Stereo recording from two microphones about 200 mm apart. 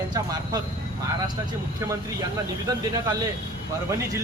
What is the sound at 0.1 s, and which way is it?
Speech, 20° right (ahead or behind).